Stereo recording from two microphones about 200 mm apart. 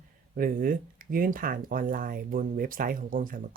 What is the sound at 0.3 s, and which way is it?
Speech, 45° right (ahead or behind).